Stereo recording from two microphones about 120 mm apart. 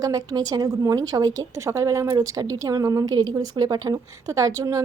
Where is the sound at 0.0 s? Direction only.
30° right (ahead or behind).